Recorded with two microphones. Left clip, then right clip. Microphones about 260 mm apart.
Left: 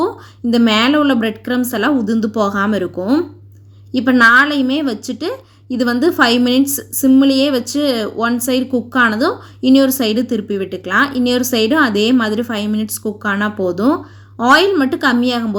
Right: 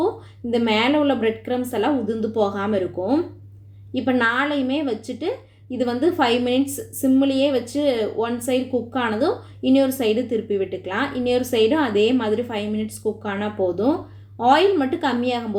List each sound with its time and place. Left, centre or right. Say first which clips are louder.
0.5 s a woman's voice: left 6 dB; left